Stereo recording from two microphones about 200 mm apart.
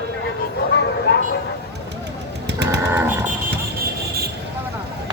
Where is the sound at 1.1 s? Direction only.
55° left (ahead or behind).